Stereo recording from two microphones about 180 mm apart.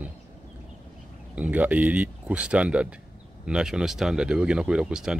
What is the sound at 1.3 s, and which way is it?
Speech, 10° right (ahead or behind).